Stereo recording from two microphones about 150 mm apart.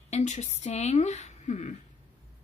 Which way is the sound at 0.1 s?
50° left (ahead or behind).